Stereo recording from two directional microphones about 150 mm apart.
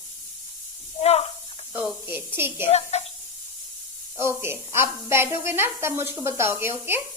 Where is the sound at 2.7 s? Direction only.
45° left (ahead or behind).